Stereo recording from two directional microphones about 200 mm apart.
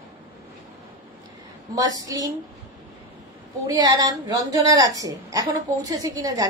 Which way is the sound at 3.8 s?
20° right (ahead or behind).